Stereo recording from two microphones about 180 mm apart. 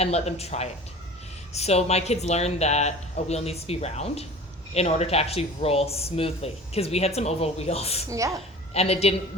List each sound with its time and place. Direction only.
0.0 s speech: 35° left (ahead or behind)
8.1 s a child's voice: 15° right (ahead or behind)
8.7 s speech: 35° left (ahead or behind)